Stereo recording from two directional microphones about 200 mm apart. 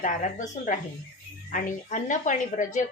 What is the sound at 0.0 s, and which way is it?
Speech, 40° left (ahead or behind).